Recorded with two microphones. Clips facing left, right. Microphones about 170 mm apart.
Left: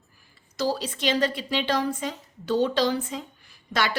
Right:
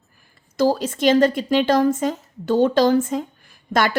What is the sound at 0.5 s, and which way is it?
A woman's voice, 50° right (ahead or behind).